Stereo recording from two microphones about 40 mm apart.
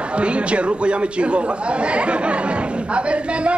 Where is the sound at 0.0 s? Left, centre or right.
Right.